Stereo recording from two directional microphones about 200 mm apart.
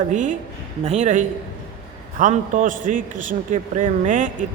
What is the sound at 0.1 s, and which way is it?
A man's voice, 40° right (ahead or behind).